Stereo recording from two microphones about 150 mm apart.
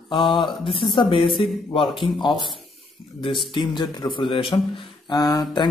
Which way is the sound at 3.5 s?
30° left (ahead or behind).